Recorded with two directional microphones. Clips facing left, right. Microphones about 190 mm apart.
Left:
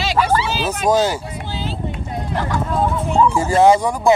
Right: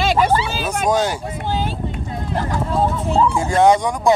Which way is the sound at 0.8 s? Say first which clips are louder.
Left 2 dB; 5° left (ahead or behind).